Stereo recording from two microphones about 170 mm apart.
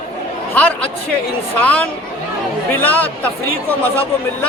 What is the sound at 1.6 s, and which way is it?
A man's voice, 10° left (ahead or behind).